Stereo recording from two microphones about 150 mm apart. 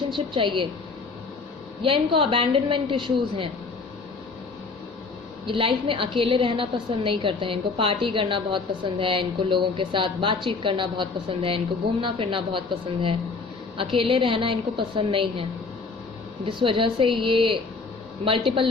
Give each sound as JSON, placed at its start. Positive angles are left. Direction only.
{"t": 0.3, "sound": "a woman's voice", "side_deg": -35}
{"t": 1.8, "sound": "a woman's voice", "side_deg": -35}
{"t": 5.5, "sound": "a woman's voice", "side_deg": -35}
{"t": 16.5, "sound": "a woman's voice", "side_deg": -35}